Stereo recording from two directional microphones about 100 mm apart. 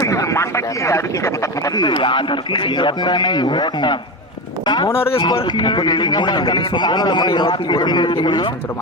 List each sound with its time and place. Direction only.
0.0 s speech: 30° left (ahead or behind)
1.7 s speech: 50° left (ahead or behind)